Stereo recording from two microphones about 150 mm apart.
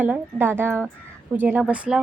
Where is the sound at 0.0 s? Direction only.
15° right (ahead or behind).